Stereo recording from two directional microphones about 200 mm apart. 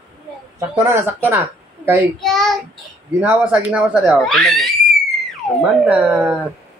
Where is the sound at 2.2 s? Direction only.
Centre (ahead or behind).